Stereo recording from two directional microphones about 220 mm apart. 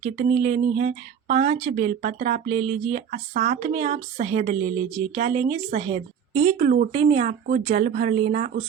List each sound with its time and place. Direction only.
0.0 s speech: 30° right (ahead or behind)